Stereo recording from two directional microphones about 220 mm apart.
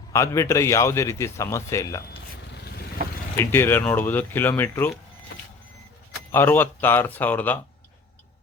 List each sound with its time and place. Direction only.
0.1 s a man's voice: 15° left (ahead or behind)
2.5 s vehicle: 45° left (ahead or behind)
3.3 s a man's voice: 10° left (ahead or behind)
6.3 s a man's voice: 10° left (ahead or behind)